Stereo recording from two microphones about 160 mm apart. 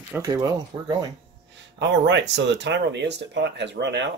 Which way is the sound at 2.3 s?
90° right.